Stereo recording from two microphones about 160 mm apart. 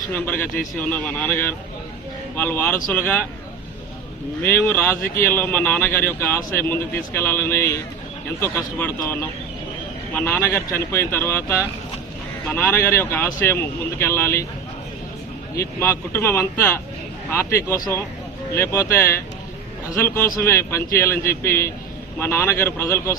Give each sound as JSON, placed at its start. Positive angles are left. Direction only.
{"t": 0.1, "sound": "speech", "side_deg": 10}
{"t": 4.4, "sound": "speech", "side_deg": 15}
{"t": 15.5, "sound": "speech", "side_deg": 15}